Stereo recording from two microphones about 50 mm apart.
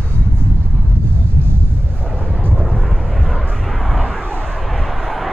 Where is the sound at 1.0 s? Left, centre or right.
Right.